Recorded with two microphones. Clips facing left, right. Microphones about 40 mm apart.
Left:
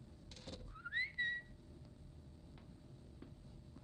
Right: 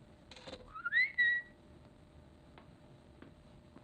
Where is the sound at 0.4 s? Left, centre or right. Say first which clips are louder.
Right 9 dB; right.